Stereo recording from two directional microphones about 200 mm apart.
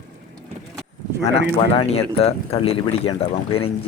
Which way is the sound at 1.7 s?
30° left (ahead or behind).